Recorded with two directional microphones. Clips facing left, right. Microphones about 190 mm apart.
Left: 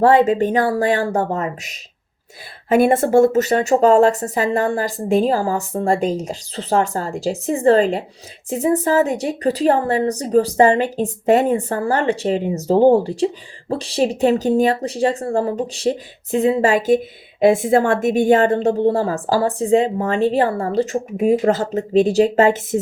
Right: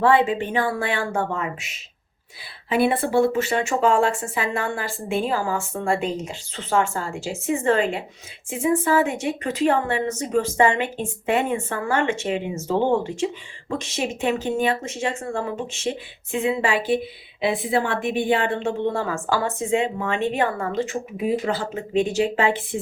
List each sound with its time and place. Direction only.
0.0 s a woman's voice: 40° left (ahead or behind)